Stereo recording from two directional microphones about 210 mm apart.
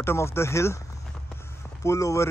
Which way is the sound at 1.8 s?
15° left (ahead or behind).